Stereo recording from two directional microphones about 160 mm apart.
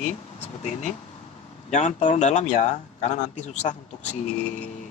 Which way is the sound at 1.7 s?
45° left (ahead or behind).